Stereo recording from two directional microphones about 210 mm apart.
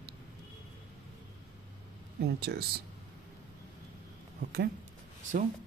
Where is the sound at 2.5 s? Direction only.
50° right (ahead or behind).